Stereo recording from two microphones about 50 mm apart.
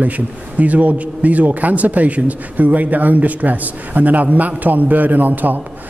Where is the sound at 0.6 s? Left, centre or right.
Right.